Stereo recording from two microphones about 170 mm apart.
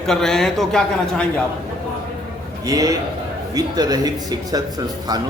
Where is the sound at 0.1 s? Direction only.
5° left (ahead or behind).